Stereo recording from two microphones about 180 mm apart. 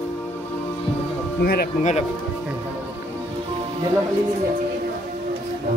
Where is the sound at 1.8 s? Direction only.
40° left (ahead or behind).